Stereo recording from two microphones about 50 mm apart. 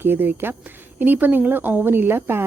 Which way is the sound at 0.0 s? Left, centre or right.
Right.